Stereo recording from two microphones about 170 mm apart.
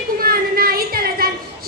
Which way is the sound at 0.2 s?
60° right (ahead or behind).